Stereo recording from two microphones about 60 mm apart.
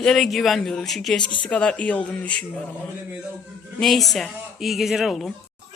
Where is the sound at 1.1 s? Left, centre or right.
Centre.